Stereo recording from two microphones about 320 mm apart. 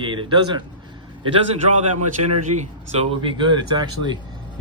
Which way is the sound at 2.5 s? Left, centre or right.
Right.